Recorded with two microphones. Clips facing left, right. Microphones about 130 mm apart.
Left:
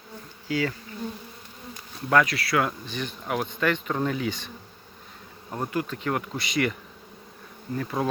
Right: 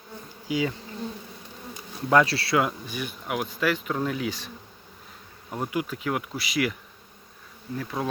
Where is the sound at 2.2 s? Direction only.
30° right (ahead or behind); by 6.7 s 5° right (ahead or behind).